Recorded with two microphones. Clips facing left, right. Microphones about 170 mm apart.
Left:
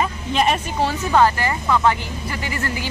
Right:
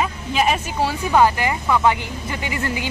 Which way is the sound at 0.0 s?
5° right (ahead or behind).